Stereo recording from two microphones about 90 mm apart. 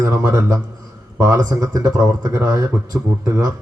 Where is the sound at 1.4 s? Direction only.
40° right (ahead or behind).